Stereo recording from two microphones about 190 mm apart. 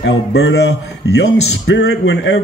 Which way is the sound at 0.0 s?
70° left (ahead or behind).